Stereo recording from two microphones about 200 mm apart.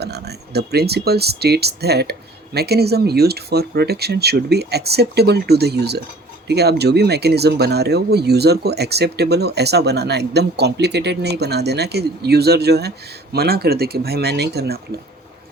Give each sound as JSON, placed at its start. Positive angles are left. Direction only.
{"t": 0.0, "sound": "speech", "side_deg": -55}